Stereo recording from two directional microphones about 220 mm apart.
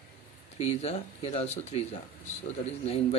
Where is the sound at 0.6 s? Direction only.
30° left (ahead or behind).